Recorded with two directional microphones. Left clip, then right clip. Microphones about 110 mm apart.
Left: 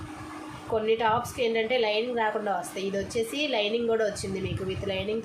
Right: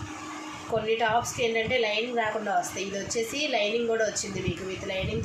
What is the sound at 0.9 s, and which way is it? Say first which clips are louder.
A woman's voice: even; 90° left.